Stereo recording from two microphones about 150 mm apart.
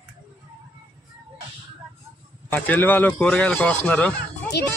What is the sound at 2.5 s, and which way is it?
Speech, 10° left (ahead or behind).